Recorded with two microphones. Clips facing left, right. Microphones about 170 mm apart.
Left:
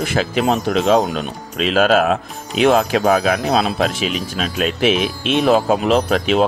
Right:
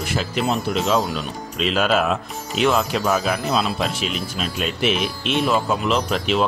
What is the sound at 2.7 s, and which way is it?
A man's voice, 60° left (ahead or behind).